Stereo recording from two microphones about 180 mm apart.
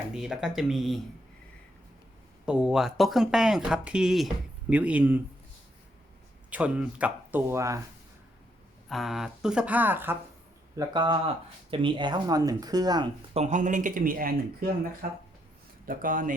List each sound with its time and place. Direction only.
0.1 s speech: 5° right (ahead or behind)
2.5 s speech: 5° right (ahead or behind)
6.5 s speech: 5° right (ahead or behind)
8.9 s speech: centre (ahead or behind)
10.8 s speech: 25° right (ahead or behind)
13.3 s speech: 40° right (ahead or behind)
15.9 s speech: 50° right (ahead or behind)